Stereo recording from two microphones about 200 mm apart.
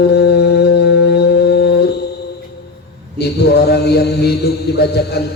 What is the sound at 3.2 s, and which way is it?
Mantra, 55° left (ahead or behind).